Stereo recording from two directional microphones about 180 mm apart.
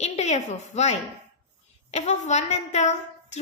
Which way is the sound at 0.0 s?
40° left (ahead or behind).